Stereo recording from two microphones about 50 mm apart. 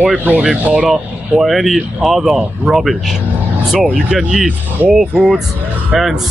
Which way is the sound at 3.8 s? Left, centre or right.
Centre.